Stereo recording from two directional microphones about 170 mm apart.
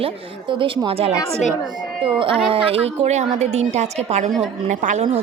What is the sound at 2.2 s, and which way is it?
A woman's voice, 30° right (ahead or behind).